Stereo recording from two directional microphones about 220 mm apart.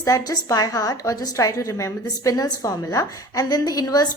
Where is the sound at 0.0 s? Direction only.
15° left (ahead or behind).